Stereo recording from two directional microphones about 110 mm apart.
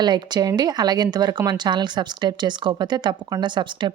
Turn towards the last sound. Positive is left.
turn(degrees=-45)  # may be behind; listen again after turning